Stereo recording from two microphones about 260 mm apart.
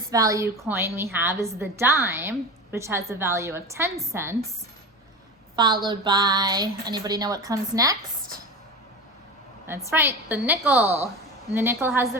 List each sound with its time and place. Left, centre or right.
0.1 s a woman's voice: centre
5.6 s a woman's voice: centre
9.6 s a woman's voice: centre